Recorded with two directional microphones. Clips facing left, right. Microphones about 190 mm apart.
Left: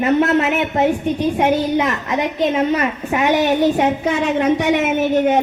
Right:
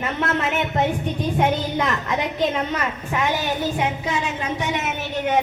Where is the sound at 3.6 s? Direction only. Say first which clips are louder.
Left 8 dB; 60° left (ahead or behind).